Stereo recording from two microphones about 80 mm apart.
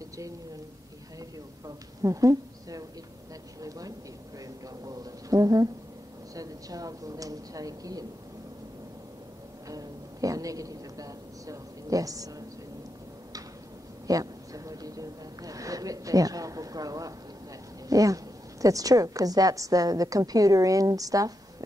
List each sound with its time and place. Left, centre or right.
2.0 s a sound: right
6.3 s a woman's voice: right
9.7 s a woman's voice: right
14.0 s a woman's voice: right